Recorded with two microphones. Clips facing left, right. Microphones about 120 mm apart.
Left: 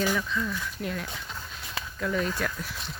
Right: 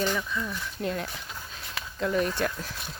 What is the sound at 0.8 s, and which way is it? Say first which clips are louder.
Speech: right 4 dB; 35° right (ahead or behind).